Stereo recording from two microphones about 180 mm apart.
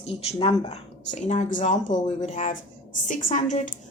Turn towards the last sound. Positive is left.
turn(degrees=45)  # may be behind; listen again after turning